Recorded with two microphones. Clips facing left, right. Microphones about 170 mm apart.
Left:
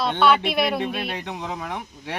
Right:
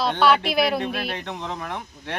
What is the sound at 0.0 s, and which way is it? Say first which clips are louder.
Speech: even; centre (ahead or behind).